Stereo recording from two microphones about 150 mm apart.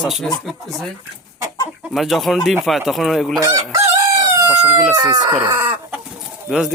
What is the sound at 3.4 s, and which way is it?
Chicken, 20° right (ahead or behind).